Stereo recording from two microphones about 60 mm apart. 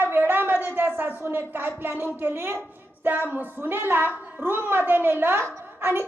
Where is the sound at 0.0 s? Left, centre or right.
Right.